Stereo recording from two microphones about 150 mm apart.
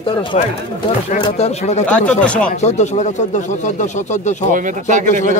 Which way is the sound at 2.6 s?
50° left (ahead or behind).